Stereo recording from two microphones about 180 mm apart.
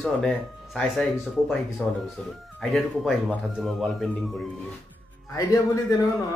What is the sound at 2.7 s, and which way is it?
Speech, centre (ahead or behind).